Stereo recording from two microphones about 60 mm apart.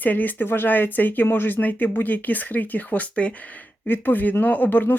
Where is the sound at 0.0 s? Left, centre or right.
Left.